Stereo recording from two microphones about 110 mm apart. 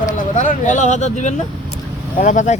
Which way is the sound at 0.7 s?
90° left.